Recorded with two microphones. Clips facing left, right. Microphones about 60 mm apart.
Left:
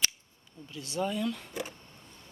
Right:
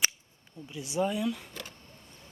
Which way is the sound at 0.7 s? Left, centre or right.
Centre.